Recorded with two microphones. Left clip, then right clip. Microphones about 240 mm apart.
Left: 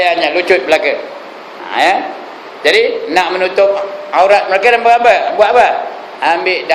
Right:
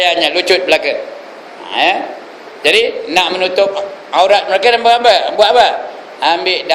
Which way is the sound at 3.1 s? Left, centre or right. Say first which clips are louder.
Even; right.